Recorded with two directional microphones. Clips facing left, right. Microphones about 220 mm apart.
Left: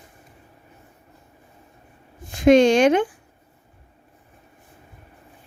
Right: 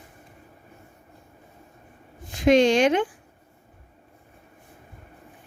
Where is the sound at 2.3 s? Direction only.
50° left (ahead or behind).